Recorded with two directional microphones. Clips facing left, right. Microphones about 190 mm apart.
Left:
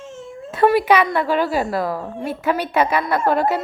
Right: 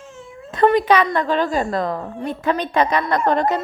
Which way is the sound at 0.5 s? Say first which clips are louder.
Even; 10° left (ahead or behind).